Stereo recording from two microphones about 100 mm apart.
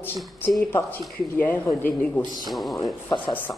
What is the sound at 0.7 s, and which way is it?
Speech, 20° left (ahead or behind).